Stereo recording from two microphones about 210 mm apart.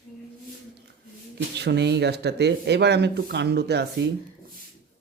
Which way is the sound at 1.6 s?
55° right (ahead or behind).